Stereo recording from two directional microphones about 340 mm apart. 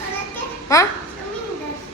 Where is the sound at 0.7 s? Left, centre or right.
Centre.